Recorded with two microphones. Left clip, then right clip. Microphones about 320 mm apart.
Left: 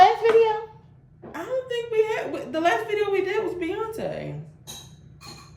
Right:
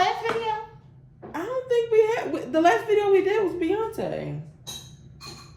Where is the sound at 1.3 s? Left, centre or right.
Centre.